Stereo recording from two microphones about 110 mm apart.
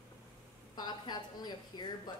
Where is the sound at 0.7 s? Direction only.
40° left (ahead or behind).